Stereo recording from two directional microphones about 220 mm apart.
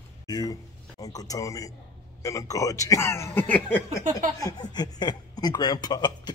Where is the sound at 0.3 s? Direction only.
15° left (ahead or behind).